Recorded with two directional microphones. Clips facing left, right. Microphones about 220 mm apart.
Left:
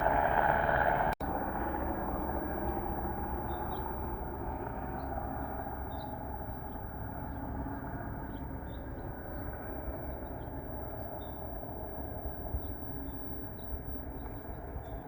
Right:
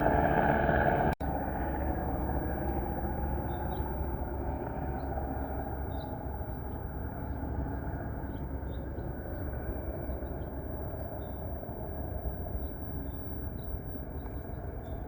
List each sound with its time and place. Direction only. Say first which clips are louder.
0.0 s vehicle: right 3 dB; 25° right (ahead or behind)